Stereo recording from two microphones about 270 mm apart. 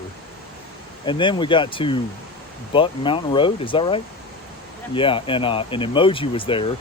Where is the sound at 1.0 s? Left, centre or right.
Centre.